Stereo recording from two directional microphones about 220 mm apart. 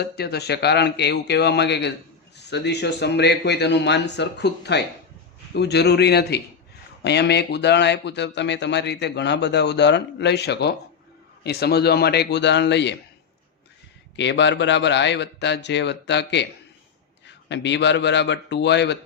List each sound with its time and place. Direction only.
0.0 s speech: 45° left (ahead or behind)
14.2 s speech: 55° left (ahead or behind)